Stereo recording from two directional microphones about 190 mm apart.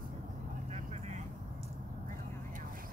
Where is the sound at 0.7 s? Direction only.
35° right (ahead or behind).